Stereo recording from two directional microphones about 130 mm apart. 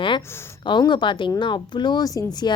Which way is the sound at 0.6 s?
35° left (ahead or behind).